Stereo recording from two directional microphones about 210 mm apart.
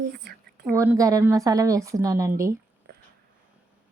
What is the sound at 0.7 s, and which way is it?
Speech, 15° right (ahead or behind).